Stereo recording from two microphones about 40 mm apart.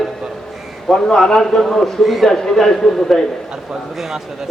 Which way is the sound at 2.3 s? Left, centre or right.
Centre.